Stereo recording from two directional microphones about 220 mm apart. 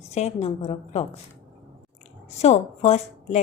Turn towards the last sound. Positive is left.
turn(degrees=30)  # may be behind; listen again after turning